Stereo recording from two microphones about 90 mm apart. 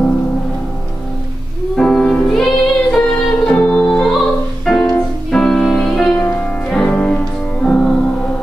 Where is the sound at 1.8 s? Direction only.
10° left (ahead or behind).